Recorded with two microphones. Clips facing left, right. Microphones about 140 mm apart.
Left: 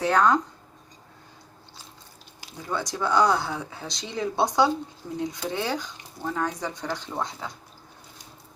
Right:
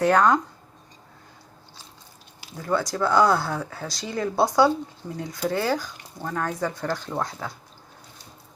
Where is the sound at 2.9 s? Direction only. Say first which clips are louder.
Right 1 dB; 5° right (ahead or behind).